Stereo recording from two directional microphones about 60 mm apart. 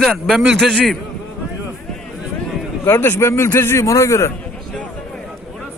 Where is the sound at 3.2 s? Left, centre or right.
Left.